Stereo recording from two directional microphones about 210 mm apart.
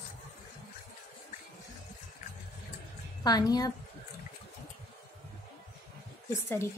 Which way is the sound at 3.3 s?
20° left (ahead or behind).